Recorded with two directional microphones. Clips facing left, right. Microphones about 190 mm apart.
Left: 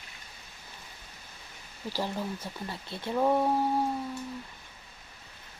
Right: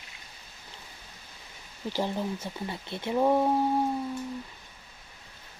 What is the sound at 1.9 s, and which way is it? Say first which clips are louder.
Speech: right 3 dB; 20° right (ahead or behind).